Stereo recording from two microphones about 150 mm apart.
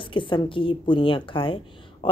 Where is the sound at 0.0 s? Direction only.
35° left (ahead or behind).